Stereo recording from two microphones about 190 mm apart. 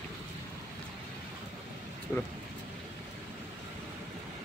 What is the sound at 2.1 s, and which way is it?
Vehicle, 10° left (ahead or behind).